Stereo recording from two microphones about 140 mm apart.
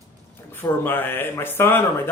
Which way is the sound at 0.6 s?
15° left (ahead or behind).